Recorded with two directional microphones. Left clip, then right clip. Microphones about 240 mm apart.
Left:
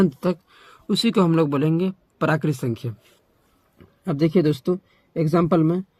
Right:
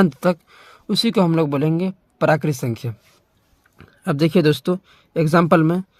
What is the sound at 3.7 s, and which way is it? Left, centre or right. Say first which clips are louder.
Speech: right 4 dB; right.